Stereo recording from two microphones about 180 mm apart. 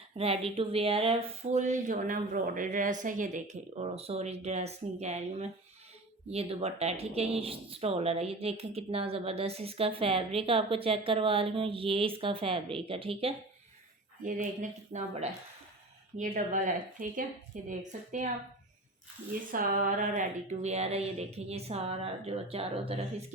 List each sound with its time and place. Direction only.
0.1 s speech: 35° right (ahead or behind)
14.3 s a woman's voice: 45° right (ahead or behind)
19.5 s speech: 50° right (ahead or behind); by 23.0 s 35° right (ahead or behind)